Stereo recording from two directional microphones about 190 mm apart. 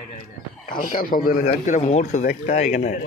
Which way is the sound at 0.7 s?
45° left (ahead or behind).